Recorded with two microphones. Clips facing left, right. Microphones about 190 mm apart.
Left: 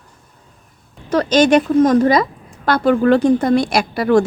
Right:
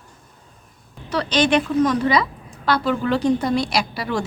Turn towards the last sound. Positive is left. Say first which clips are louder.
# left 9 dB
turn(degrees=50)  # may be behind; listen again after turning